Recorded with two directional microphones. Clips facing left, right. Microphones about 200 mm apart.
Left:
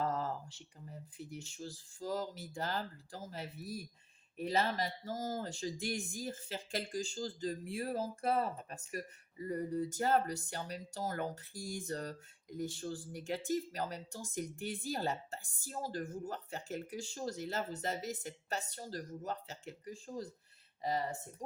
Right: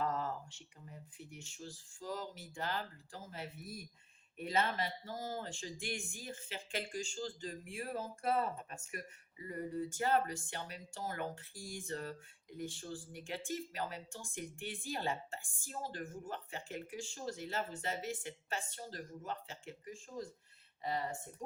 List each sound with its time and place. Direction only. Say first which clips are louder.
0.0 s speech: left 1 dB; 35° left (ahead or behind)